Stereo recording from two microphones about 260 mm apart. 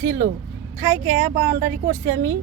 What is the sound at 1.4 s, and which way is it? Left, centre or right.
Speech, right.